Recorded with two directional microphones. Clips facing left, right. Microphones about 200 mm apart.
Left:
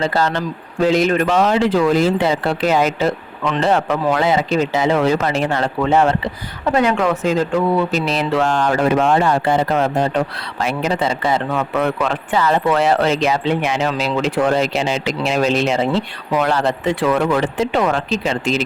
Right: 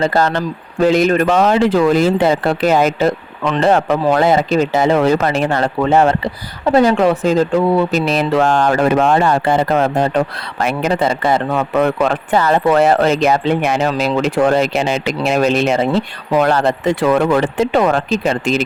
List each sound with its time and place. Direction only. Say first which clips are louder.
0.0 s speech: right 3 dB; 50° right (ahead or behind)
6.7 s speech: right 5 dB; 35° right (ahead or behind)
8.0 s speech: right 3 dB; 50° right (ahead or behind)